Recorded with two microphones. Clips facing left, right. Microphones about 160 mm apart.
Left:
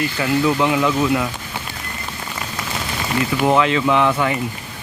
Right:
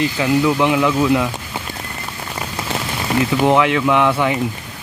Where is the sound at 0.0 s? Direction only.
15° right (ahead or behind).